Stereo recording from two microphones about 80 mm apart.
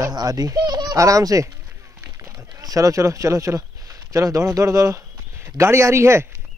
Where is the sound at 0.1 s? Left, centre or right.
Right.